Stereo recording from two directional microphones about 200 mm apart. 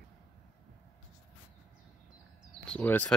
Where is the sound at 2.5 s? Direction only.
5° left (ahead or behind).